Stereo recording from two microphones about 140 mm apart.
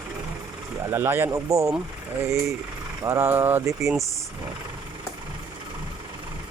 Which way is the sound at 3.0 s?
20° right (ahead or behind).